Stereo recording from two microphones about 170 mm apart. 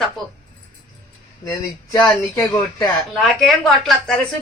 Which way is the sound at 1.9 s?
15° left (ahead or behind).